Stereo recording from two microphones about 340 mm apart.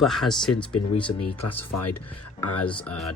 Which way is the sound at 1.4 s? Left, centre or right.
Left.